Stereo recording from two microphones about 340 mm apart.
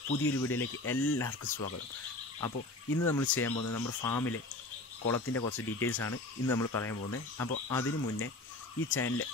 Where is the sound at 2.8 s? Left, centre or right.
Left.